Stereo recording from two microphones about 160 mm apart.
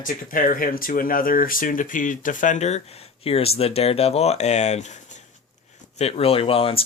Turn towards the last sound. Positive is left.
turn(degrees=35)  # may be behind; listen again after turning